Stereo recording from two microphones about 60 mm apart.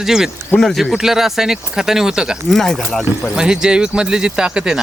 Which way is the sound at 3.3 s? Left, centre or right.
Centre.